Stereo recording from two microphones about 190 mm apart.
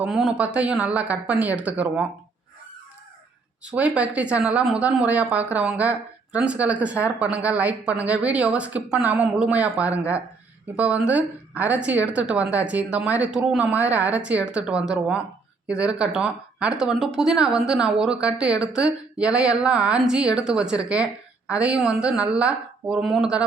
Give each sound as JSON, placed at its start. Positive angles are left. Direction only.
{"t": 0.0, "sound": "speech", "side_deg": 0}
{"t": 3.7, "sound": "speech", "side_deg": -5}